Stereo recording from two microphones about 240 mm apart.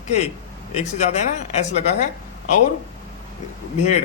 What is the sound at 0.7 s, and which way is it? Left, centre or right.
Speech, left.